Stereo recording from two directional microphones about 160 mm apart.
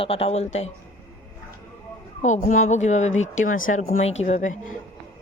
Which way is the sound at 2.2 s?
50° left (ahead or behind).